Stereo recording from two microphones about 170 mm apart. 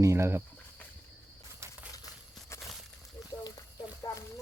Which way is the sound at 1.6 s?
15° right (ahead or behind).